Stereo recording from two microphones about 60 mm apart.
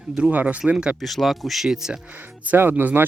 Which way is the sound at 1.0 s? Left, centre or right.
Centre.